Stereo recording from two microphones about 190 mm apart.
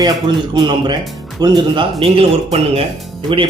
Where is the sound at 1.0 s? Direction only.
Centre (ahead or behind).